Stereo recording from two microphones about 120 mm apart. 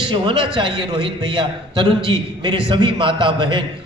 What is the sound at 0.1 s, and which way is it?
A man's voice, 45° right (ahead or behind).